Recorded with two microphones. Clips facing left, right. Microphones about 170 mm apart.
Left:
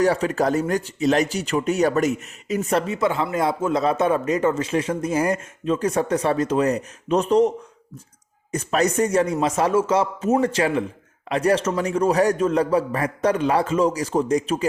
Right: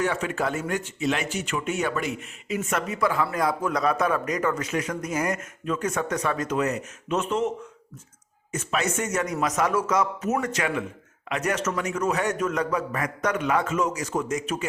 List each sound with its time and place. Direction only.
0.0 s speech: 35° left (ahead or behind)
8.5 s speech: 35° left (ahead or behind)